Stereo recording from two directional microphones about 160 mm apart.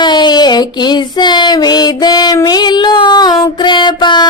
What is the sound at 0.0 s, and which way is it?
Child singing, 25° left (ahead or behind).